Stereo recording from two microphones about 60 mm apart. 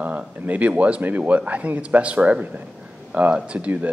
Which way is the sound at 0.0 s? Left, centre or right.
Right.